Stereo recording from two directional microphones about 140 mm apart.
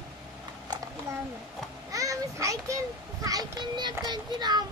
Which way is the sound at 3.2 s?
25° right (ahead or behind).